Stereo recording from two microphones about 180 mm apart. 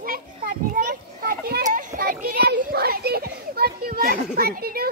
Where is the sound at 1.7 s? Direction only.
45° right (ahead or behind).